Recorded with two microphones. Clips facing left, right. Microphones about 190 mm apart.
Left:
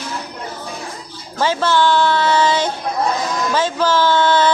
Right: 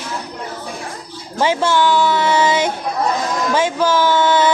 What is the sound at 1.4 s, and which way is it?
Speech, 15° right (ahead or behind).